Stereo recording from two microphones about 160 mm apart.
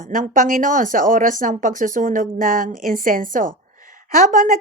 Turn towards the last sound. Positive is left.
turn(degrees=-55)  # may be behind; listen again after turning